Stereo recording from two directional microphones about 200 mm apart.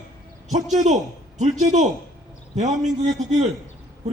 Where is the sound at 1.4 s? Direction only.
35° right (ahead or behind).